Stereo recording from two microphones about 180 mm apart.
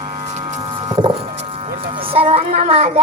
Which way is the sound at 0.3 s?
30° right (ahead or behind).